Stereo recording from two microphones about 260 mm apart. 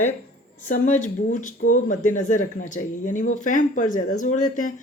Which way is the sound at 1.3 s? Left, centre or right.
Left.